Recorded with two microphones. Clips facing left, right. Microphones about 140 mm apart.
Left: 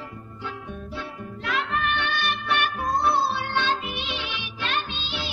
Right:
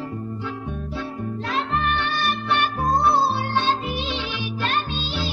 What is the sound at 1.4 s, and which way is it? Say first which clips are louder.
Music: right 2 dB; 35° right (ahead or behind).